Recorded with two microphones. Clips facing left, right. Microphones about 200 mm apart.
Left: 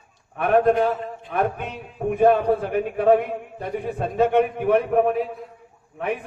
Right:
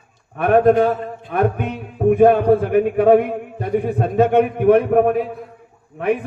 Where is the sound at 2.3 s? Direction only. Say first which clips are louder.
Right 5 dB; 55° right (ahead or behind).